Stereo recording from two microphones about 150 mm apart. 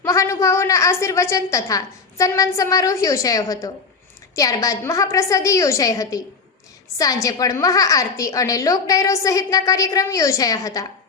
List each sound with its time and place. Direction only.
0.0 s a woman's voice: 20° left (ahead or behind)